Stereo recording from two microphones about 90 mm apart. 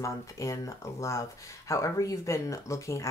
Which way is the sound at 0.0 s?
35° left (ahead or behind).